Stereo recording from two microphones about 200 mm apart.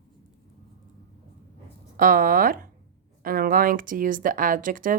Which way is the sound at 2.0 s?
45° right (ahead or behind).